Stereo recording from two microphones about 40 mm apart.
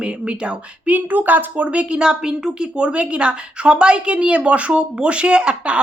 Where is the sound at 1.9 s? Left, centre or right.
Centre.